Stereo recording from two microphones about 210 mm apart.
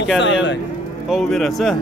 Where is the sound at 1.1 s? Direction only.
Centre (ahead or behind).